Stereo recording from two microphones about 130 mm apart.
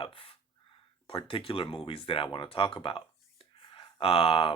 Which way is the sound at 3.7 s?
45° left (ahead or behind).